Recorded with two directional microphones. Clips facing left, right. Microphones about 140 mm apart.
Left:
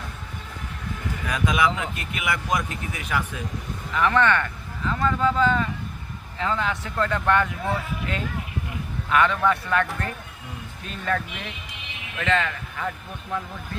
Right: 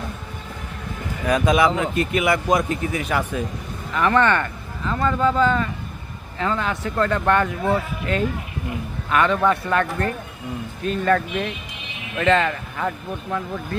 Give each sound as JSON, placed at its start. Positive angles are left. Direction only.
{"t": 1.3, "sound": "a man's voice", "side_deg": -35}
{"t": 9.0, "sound": "a man's voice", "side_deg": -40}
{"t": 10.8, "sound": "speech", "side_deg": -55}
{"t": 12.1, "sound": "speech", "side_deg": -40}